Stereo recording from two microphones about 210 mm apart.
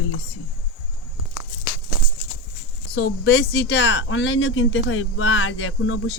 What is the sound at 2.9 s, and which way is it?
Speech, 55° left (ahead or behind).